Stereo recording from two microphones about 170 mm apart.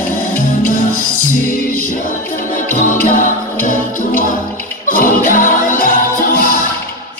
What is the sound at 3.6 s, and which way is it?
Music, 50° left (ahead or behind).